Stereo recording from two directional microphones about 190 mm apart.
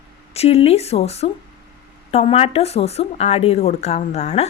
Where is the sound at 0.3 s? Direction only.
30° left (ahead or behind).